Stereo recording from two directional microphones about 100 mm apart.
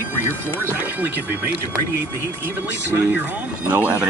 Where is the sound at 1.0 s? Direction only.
20° right (ahead or behind).